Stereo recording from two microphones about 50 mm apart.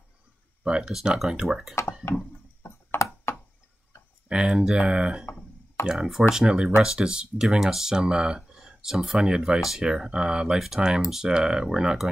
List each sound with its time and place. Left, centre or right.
0.7 s speech: centre
2.6 s a sound: left
4.3 s speech: centre